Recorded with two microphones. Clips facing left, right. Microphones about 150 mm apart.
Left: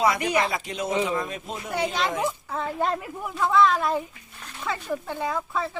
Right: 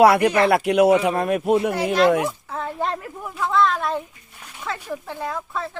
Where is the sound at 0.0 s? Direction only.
65° right (ahead or behind).